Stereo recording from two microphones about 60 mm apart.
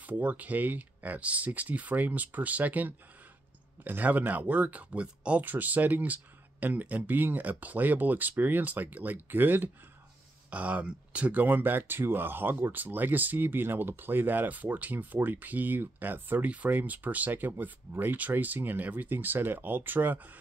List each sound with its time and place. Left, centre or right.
0.0 s speech: right
5.4 s speech: right